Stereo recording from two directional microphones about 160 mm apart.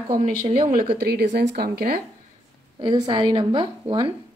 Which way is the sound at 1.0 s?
85° right.